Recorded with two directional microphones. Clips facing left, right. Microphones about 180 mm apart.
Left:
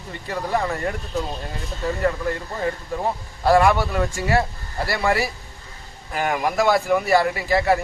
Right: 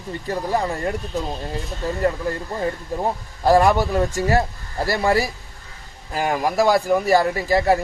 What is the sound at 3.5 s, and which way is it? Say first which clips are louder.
Speech: right 1 dB; 40° right (ahead or behind).